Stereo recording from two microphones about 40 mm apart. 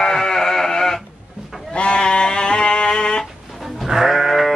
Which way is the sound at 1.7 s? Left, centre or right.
Left.